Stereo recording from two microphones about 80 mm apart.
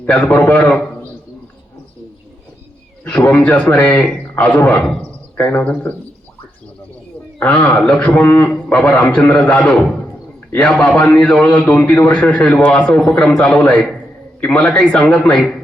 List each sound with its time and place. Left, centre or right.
0.0 s a man's voice: centre
3.0 s a man's voice: centre
7.3 s a man's voice: centre